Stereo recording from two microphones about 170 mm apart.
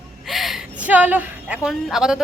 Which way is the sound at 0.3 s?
Centre (ahead or behind).